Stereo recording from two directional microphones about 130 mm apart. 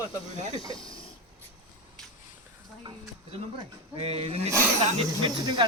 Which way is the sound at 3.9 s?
50° right (ahead or behind).